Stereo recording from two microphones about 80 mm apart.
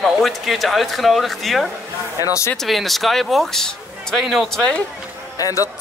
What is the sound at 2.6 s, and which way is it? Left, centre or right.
Speech, centre.